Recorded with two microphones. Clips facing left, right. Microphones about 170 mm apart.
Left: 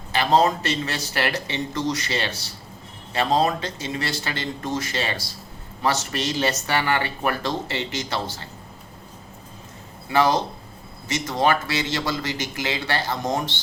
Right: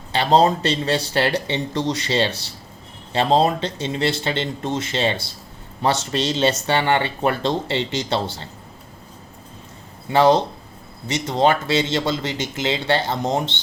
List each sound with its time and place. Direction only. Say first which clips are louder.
0.1 s speech: right 3 dB; 30° right (ahead or behind)
10.1 s speech: right 5 dB; 30° right (ahead or behind)